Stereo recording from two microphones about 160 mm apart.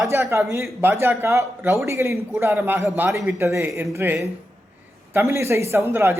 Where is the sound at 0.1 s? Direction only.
15° right (ahead or behind).